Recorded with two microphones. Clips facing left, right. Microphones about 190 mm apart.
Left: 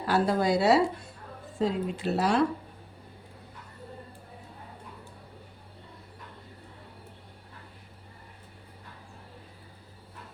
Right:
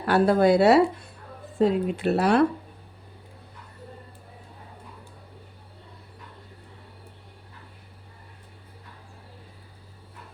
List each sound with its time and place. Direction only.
0.0 s speech: 60° right (ahead or behind)